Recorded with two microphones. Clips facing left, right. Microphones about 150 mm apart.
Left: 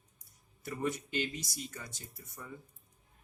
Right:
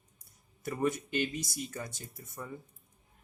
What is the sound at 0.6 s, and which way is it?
Speech, 55° right (ahead or behind).